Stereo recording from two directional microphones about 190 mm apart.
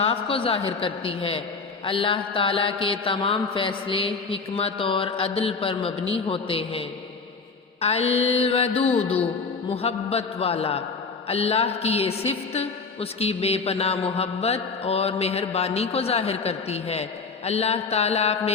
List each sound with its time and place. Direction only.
0.0 s mantra: 30° left (ahead or behind)
7.8 s a woman's voice: 35° left (ahead or behind)